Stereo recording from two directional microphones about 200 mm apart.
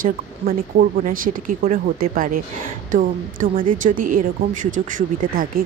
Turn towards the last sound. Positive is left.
turn(degrees=-40)  # may be behind; listen again after turning